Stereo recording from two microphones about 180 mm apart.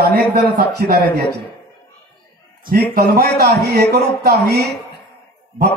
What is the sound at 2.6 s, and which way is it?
A man's voice, 55° right (ahead or behind).